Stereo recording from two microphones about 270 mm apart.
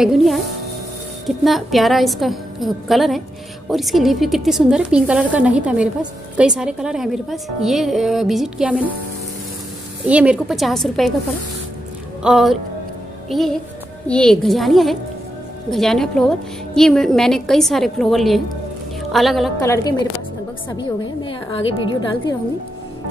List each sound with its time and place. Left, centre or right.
0.0 s a woman's voice: centre
10.0 s a woman's voice: centre
12.2 s a woman's voice: centre
19.6 s a woman's voice: centre